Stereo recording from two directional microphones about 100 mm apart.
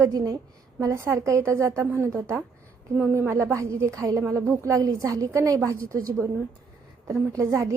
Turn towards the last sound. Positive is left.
turn(degrees=-30)  # may be behind; listen again after turning